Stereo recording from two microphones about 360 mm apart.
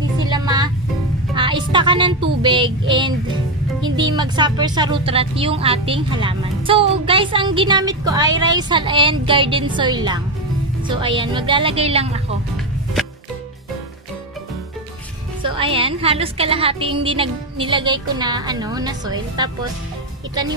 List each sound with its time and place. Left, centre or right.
0.3 s music: centre
1.3 s a sound: centre
2.9 s speech: centre
15.4 s speech: centre